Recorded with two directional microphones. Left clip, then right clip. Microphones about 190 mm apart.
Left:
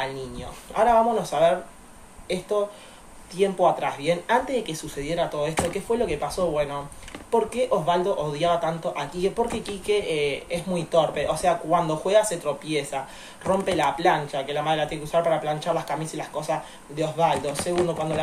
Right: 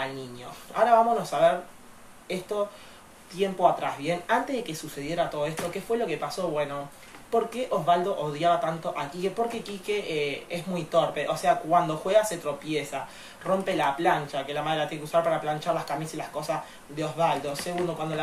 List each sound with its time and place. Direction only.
0.7 s speech: 5° left (ahead or behind)
3.3 s a man's voice: 5° left (ahead or behind)